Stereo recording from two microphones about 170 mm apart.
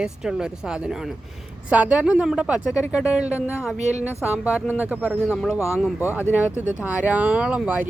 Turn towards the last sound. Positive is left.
turn(degrees=-10)  # may be behind; listen again after turning